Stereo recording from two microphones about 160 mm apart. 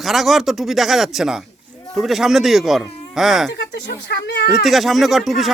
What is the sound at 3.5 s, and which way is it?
Speech, 90° left.